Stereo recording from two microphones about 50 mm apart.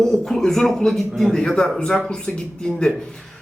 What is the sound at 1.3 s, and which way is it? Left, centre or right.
Speech, centre.